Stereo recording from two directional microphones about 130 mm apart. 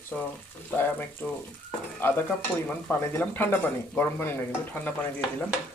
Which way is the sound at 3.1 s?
15° left (ahead or behind).